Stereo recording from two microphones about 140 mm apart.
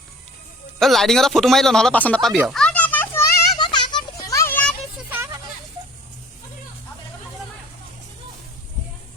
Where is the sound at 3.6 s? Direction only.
30° left (ahead or behind); by 4.7 s 10° left (ahead or behind).